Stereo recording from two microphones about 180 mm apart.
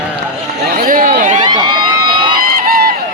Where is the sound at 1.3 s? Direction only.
25° right (ahead or behind).